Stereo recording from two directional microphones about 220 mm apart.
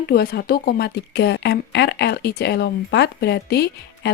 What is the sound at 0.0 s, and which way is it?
A woman's voice, 45° left (ahead or behind).